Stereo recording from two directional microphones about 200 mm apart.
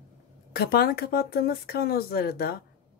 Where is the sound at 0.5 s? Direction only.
50° left (ahead or behind).